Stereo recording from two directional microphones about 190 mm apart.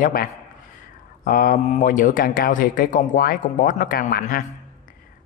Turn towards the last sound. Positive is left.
turn(degrees=50)  # may be behind; listen again after turning